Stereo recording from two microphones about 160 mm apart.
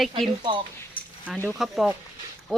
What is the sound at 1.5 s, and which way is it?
Speech, centre (ahead or behind).